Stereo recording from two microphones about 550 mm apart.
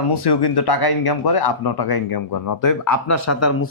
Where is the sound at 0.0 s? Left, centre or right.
Left.